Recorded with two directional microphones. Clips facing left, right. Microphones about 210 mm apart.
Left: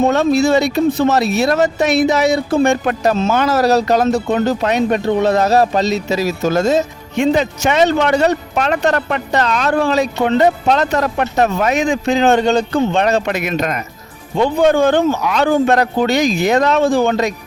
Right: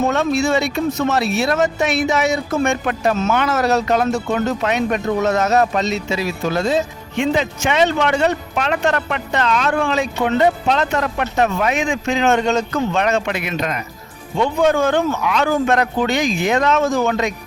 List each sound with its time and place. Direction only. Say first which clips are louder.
0.0 s speech: left 4 dB; 35° left (ahead or behind)
14.3 s speech: left 3 dB; 35° left (ahead or behind)